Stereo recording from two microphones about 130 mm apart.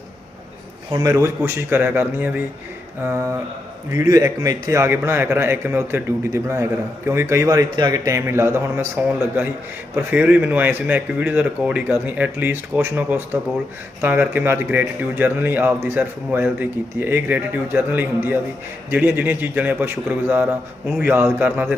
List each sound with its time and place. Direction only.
0.9 s a man's voice: 25° right (ahead or behind); by 21.8 s 10° right (ahead or behind)